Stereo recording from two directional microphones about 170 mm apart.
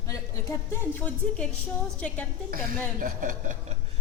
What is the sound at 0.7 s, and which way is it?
Speech, 10° left (ahead or behind).